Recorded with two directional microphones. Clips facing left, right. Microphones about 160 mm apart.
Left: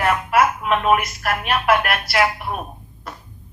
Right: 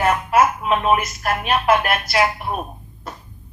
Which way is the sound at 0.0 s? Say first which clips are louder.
Right 1 dB; 25° right (ahead or behind).